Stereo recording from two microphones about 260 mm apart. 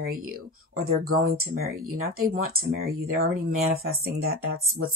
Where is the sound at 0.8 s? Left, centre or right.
Right.